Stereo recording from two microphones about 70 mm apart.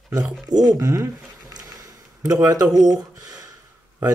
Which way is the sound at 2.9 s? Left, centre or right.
Right.